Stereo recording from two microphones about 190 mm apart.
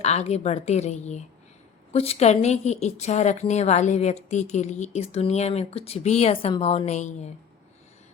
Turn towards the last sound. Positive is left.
turn(degrees=35)  # may be behind; listen again after turning